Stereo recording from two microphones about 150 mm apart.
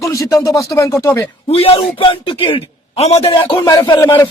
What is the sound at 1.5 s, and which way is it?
A man's voice, 40° left (ahead or behind).